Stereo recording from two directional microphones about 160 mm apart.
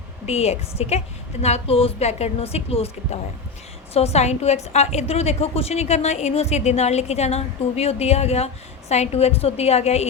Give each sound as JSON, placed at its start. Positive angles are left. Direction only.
{"t": 0.3, "sound": "a woman's voice", "side_deg": 40}